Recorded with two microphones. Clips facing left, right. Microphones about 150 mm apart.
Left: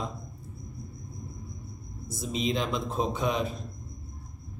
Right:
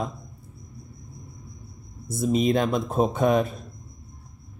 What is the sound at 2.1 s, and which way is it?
Speech, 50° right (ahead or behind).